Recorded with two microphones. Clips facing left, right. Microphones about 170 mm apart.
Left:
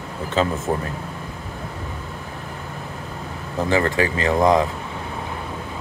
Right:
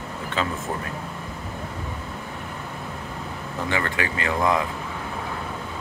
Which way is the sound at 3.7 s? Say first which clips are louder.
Left 7 dB; 30° left (ahead or behind).